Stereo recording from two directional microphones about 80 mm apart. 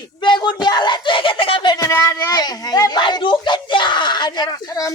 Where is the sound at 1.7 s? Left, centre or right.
Left.